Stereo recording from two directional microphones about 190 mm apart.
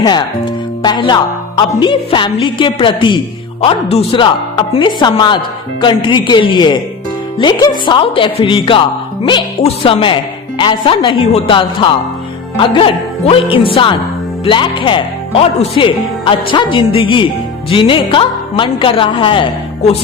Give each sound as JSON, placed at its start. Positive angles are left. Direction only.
{"t": 0.0, "sound": "speech", "side_deg": 20}